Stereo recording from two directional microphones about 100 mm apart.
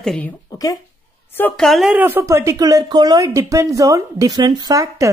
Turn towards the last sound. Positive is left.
turn(degrees=-35)  # may be behind; listen again after turning